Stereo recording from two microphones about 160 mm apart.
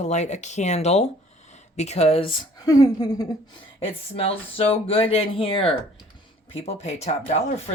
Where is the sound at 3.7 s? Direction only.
35° left (ahead or behind).